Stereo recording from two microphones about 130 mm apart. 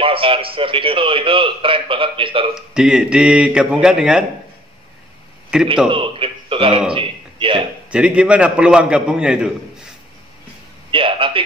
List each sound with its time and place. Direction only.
0.0 s a man's voice: 45° right (ahead or behind)
2.5 s a man's voice: 5° right (ahead or behind)
5.5 s a man's voice: 5° right (ahead or behind)
5.9 s a man's voice: 40° right (ahead or behind)
7.9 s a man's voice: 10° right (ahead or behind)
10.9 s a man's voice: 45° right (ahead or behind)